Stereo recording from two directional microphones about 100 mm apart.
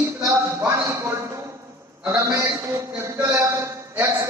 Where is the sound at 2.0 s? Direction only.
30° right (ahead or behind).